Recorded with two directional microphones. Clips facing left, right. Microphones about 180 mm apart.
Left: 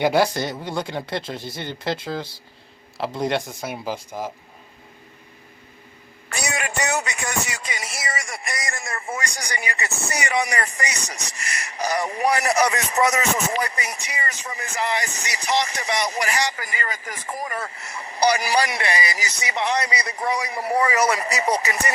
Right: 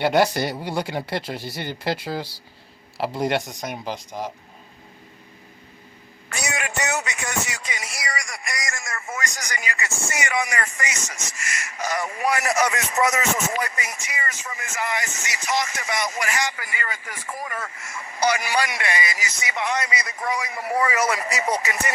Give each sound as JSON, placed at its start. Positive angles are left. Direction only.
{"t": 0.0, "sound": "speech", "side_deg": 0}
{"t": 6.2, "sound": "a sound", "side_deg": 35}
{"t": 9.4, "sound": "speech", "side_deg": 35}